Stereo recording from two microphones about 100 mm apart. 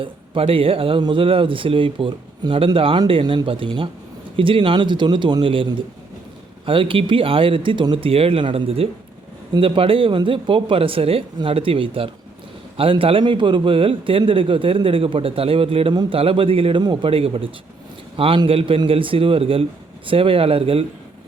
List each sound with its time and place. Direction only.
0.0 s a man's voice: 65° right (ahead or behind)
2.4 s speech: 45° right (ahead or behind)
2.7 s a man's voice: 65° right (ahead or behind)
6.7 s a man's voice: 60° right (ahead or behind)
16.8 s a man's voice: 55° right (ahead or behind); by 20.8 s 70° right (ahead or behind)